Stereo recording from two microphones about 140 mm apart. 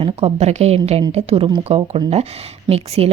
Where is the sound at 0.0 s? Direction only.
50° right (ahead or behind).